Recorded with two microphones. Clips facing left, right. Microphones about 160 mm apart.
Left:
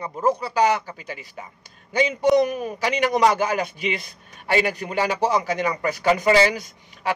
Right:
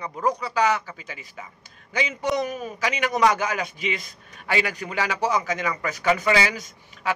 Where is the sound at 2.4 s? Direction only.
55° left (ahead or behind).